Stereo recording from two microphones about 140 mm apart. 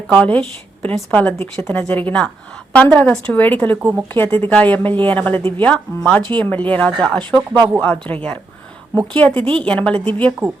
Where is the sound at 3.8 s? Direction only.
20° right (ahead or behind).